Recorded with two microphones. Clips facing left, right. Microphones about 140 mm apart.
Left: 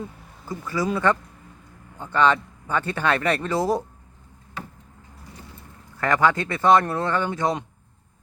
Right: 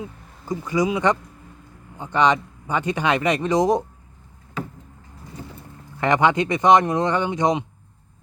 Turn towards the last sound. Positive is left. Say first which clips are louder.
# right 3 dB
turn(degrees=-20)  # may be behind; listen again after turning